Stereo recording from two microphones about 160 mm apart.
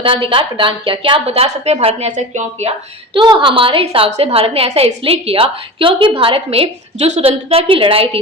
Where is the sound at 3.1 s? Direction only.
30° right (ahead or behind).